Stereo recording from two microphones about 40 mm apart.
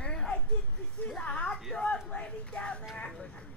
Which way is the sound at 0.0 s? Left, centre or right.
Centre.